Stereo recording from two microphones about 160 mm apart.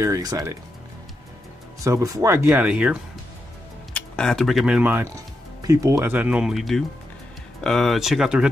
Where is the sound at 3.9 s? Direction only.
5° left (ahead or behind).